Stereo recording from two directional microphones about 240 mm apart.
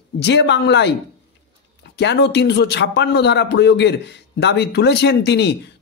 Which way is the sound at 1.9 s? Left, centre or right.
Left.